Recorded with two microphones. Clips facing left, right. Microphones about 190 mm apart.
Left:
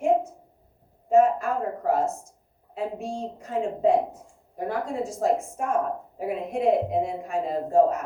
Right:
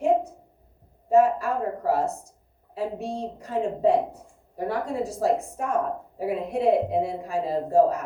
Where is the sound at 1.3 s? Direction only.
35° right (ahead or behind).